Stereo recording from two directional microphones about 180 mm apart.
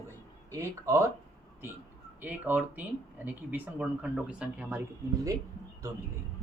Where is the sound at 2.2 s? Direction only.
10° right (ahead or behind).